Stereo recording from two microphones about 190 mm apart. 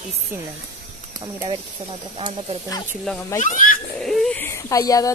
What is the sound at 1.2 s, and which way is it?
Speech, 25° right (ahead or behind).